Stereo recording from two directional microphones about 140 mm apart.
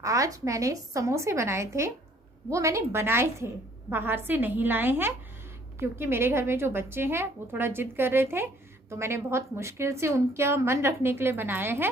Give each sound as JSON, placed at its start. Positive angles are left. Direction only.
{"t": 0.0, "sound": "a woman's voice", "side_deg": -25}